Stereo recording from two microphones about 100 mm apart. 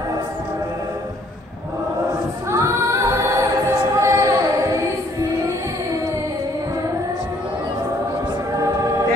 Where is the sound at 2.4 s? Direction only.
30° right (ahead or behind).